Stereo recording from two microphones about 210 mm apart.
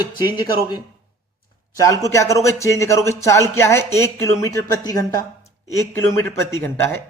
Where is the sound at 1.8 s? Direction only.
15° left (ahead or behind).